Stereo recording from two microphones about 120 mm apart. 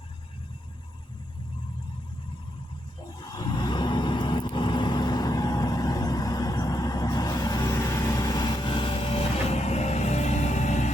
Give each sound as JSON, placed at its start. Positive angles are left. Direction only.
{"t": 3.2, "sound": "vehicle", "side_deg": 35}